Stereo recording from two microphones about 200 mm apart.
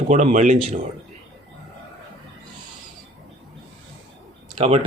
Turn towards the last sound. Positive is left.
turn(degrees=-30)  # may be behind; listen again after turning